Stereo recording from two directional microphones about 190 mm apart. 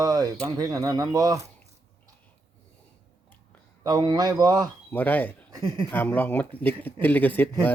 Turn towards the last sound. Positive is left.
turn(degrees=10)  # may be behind; listen again after turning